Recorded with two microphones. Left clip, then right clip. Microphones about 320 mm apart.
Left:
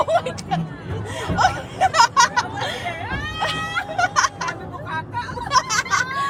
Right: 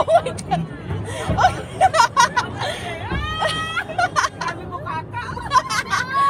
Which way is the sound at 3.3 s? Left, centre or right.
Centre.